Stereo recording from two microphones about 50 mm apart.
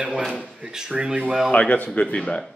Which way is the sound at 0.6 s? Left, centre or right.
Centre.